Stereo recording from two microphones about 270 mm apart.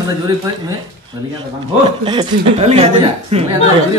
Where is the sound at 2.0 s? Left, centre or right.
Centre.